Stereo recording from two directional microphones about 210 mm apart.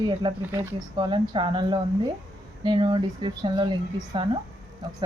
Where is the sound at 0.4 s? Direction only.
10° right (ahead or behind).